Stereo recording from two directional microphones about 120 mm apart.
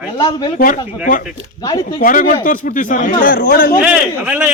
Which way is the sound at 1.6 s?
35° left (ahead or behind).